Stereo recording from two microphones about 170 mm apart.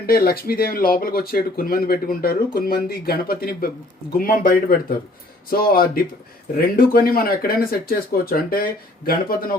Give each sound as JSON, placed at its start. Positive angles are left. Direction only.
{"t": 0.0, "sound": "speech", "side_deg": 60}